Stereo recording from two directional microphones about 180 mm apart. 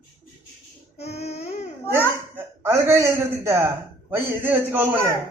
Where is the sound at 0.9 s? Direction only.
35° left (ahead or behind).